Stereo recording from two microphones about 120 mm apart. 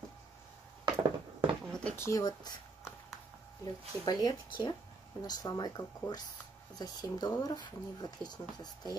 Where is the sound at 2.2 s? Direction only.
35° left (ahead or behind).